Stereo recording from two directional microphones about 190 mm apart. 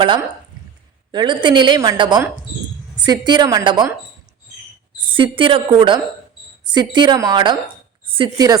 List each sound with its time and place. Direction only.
1.1 s a woman's voice: 25° right (ahead or behind)
5.1 s a woman's voice: 25° right (ahead or behind)